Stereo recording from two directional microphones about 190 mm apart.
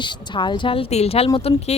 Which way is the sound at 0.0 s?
25° left (ahead or behind).